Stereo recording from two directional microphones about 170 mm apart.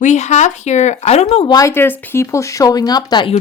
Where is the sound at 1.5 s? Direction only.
20° left (ahead or behind).